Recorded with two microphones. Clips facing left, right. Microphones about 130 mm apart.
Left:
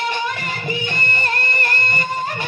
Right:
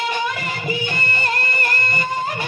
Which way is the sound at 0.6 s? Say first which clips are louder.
Right 1 dB; 25° right (ahead or behind).